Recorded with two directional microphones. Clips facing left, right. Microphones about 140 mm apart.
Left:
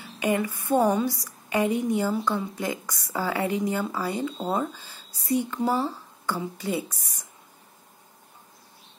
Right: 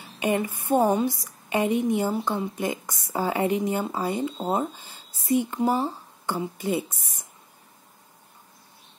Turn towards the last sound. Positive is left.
turn(degrees=-20)  # may be behind; listen again after turning